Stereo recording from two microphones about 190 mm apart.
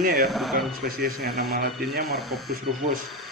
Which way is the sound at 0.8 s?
50° right (ahead or behind).